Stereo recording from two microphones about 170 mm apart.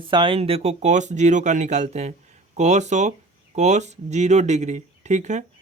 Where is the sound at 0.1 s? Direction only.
30° right (ahead or behind).